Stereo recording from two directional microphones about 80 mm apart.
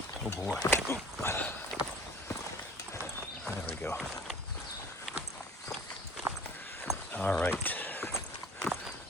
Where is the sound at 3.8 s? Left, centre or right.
Left.